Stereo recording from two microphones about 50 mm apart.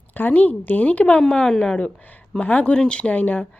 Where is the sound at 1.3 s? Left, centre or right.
Centre.